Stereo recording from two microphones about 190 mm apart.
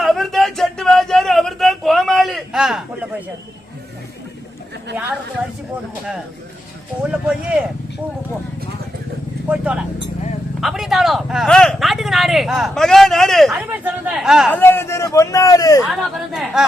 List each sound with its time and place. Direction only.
0.0 s a sound: centre (ahead or behind)
7.0 s speech: 5° right (ahead or behind)
9.5 s speech: 5° right (ahead or behind)
14.5 s speech: 10° left (ahead or behind)
15.9 s speech: centre (ahead or behind)